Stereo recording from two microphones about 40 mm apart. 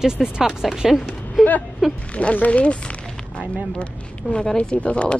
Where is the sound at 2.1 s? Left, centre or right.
Left.